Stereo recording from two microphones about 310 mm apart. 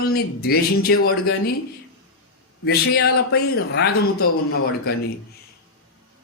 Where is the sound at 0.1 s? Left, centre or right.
Left.